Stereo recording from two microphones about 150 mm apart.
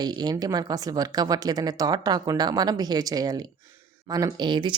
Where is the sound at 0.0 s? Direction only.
25° right (ahead or behind).